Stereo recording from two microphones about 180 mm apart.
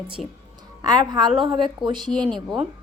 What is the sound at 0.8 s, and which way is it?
A woman's voice, 25° right (ahead or behind).